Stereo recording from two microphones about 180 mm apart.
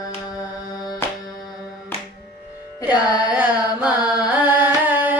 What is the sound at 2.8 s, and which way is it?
Carnatic music, 10° right (ahead or behind).